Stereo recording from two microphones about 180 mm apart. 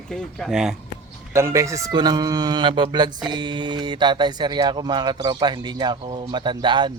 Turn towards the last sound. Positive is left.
turn(degrees=-25)  # may be behind; listen again after turning